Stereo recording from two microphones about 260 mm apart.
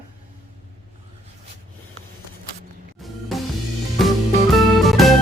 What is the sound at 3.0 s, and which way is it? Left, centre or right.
Music, centre.